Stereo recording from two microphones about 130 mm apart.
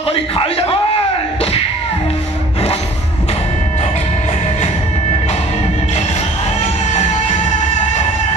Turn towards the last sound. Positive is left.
turn(degrees=55)  # may be behind; listen again after turning